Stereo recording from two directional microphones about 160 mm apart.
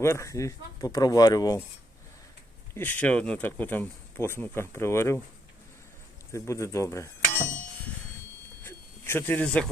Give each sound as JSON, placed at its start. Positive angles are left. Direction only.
{"t": 0.0, "sound": "speech", "side_deg": 15}
{"t": 2.7, "sound": "speech", "side_deg": 10}
{"t": 6.3, "sound": "speech", "side_deg": 20}
{"t": 8.6, "sound": "a sound", "side_deg": 15}